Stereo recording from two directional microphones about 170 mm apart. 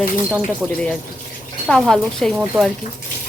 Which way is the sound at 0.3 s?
5° right (ahead or behind).